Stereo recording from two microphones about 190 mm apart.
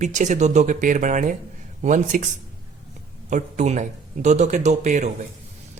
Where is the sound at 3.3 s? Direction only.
40° right (ahead or behind).